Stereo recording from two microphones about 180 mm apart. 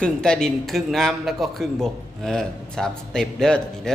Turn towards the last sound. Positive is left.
turn(degrees=5)  # may be behind; listen again after turning